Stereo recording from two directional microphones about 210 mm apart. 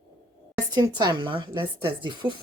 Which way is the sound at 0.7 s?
20° right (ahead or behind).